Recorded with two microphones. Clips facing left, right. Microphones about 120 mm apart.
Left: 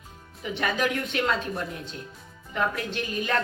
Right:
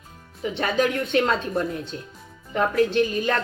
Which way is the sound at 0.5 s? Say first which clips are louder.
Right 4 dB; 30° right (ahead or behind).